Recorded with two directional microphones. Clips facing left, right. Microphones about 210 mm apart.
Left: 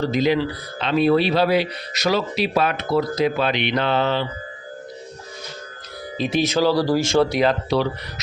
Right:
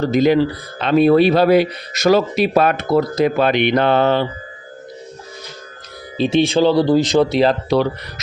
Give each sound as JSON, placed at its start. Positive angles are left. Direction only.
{"t": 0.0, "sound": "speech", "side_deg": -50}
{"t": 6.1, "sound": "speech", "side_deg": -30}